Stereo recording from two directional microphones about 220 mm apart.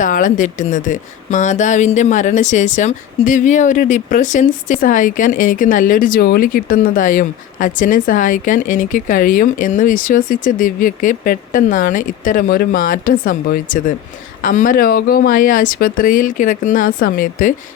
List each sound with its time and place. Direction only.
0.0 s speech: 35° left (ahead or behind)